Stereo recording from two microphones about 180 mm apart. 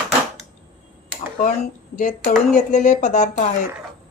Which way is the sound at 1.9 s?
45° left (ahead or behind).